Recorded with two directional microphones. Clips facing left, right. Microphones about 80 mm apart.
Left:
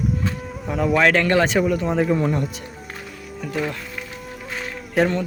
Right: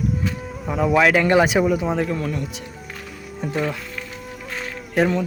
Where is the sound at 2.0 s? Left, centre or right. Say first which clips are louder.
Left 4 dB; centre.